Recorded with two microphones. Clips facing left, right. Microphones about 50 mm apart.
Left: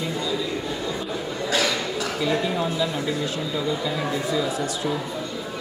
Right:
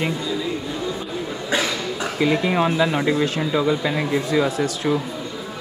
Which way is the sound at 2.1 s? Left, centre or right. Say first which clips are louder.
Right 6 dB; right.